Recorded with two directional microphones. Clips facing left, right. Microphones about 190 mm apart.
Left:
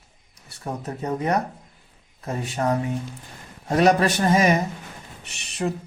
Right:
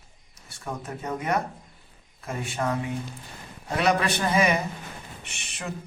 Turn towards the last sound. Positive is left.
turn(degrees=35)  # may be behind; listen again after turning